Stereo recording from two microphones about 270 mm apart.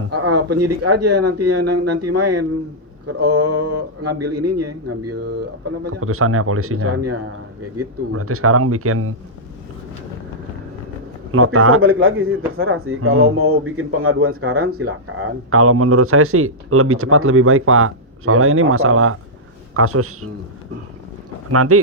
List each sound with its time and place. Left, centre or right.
0.1 s a sound: right
0.6 s speech: right
3.4 s a man's voice: right
11.3 s a man's voice: right
21.5 s speech: right